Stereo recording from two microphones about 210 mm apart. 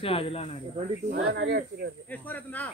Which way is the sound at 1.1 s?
55° right (ahead or behind).